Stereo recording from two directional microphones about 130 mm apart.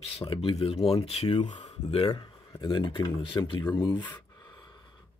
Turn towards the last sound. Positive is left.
turn(degrees=35)  # may be behind; listen again after turning